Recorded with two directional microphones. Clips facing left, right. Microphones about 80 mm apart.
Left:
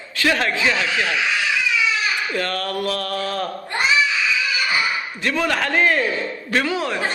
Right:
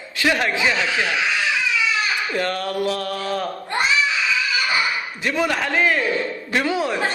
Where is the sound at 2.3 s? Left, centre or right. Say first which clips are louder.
Right 1 dB; right.